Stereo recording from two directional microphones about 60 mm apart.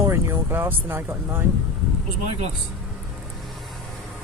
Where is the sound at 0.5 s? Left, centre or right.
Right.